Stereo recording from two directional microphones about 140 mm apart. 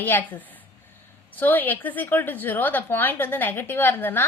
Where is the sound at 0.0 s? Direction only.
15° left (ahead or behind).